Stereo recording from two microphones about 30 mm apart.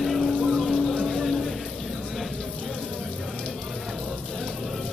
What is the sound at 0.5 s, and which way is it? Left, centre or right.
Music, centre.